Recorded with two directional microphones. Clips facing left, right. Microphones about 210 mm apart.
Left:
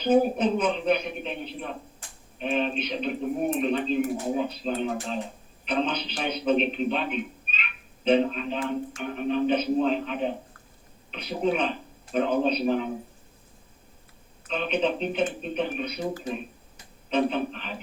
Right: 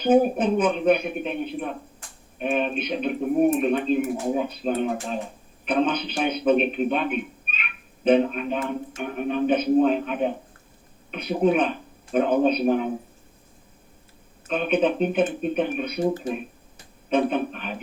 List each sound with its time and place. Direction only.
0.0 s speech: 50° right (ahead or behind)
14.4 s speech: 50° right (ahead or behind)